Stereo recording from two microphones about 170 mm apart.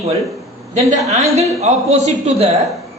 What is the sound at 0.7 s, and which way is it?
A man's voice, 40° right (ahead or behind).